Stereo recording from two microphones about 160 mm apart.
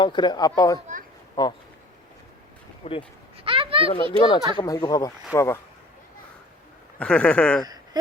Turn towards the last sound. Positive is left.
turn(degrees=5)  # may be behind; listen again after turning